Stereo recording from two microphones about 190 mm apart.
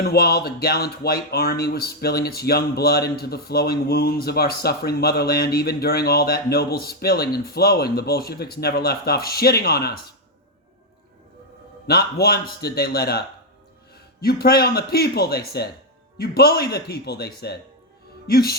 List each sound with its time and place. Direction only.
0.0 s speech: 55° left (ahead or behind)
11.9 s a man's voice: 55° left (ahead or behind)